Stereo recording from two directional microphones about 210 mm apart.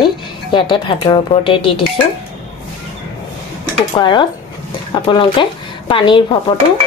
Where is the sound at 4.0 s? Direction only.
20° left (ahead or behind).